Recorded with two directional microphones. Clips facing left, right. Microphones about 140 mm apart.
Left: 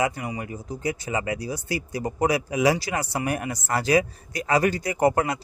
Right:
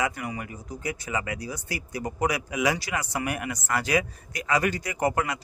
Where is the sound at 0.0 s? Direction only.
25° left (ahead or behind).